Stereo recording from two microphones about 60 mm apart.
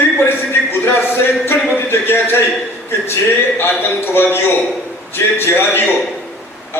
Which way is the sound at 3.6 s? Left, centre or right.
Left.